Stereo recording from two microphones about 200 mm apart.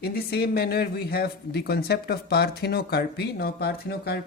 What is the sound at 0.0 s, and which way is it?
Speech, 50° left (ahead or behind).